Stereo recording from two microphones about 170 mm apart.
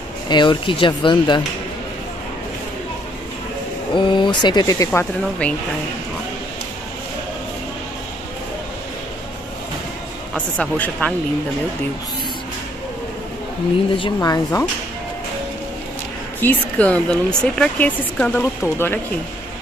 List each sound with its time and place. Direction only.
0.3 s speech: 25° left (ahead or behind)
3.9 s speech: 30° left (ahead or behind)
10.3 s speech: 5° left (ahead or behind)
13.9 s speech: 25° left (ahead or behind)
16.3 s speech: 10° left (ahead or behind)